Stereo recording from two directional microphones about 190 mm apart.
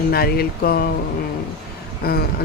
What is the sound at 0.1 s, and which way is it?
Speech, 55° left (ahead or behind).